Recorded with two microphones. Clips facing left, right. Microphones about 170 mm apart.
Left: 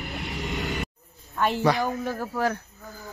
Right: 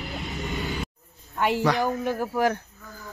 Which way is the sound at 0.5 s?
75° left (ahead or behind).